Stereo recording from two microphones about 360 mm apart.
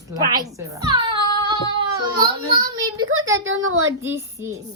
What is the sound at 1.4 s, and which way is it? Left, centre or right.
Child singing, centre.